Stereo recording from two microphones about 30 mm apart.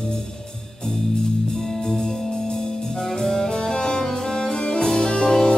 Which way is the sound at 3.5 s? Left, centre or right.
Left.